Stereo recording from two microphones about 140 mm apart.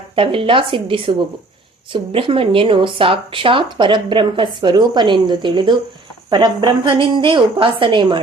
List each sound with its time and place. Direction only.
0.2 s speech: 40° right (ahead or behind)